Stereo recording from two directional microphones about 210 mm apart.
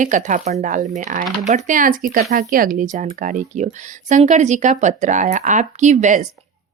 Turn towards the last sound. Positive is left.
turn(degrees=-35)  # may be behind; listen again after turning